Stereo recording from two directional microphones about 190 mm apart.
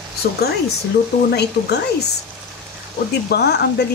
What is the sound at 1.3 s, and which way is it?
Speech, 60° left (ahead or behind).